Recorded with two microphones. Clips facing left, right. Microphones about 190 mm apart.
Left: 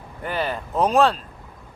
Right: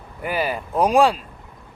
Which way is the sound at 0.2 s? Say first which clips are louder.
Right 2 dB; 10° right (ahead or behind).